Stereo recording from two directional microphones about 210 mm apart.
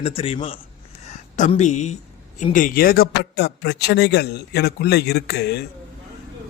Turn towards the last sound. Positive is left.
turn(degrees=50)  # may be behind; listen again after turning